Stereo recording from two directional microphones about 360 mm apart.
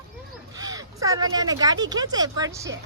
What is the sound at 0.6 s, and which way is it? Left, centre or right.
Speech, centre.